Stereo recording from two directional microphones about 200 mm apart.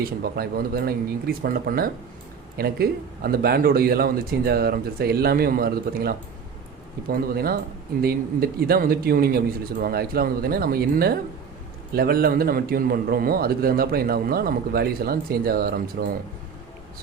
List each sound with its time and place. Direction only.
0.2 s a man's voice: 50° right (ahead or behind)